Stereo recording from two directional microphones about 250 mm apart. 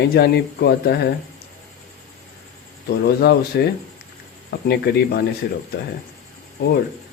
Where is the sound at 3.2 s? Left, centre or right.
Left.